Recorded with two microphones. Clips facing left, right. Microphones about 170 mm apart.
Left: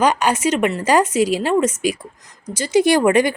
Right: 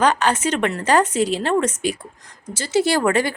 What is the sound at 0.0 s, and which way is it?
Speech, 10° left (ahead or behind).